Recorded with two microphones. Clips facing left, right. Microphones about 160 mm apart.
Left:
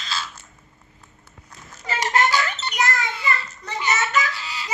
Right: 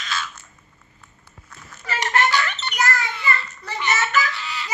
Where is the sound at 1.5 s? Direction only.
25° left (ahead or behind).